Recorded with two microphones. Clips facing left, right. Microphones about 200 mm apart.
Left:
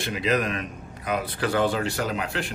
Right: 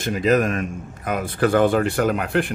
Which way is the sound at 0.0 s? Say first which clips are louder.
Right 6 dB; 45° right (ahead or behind).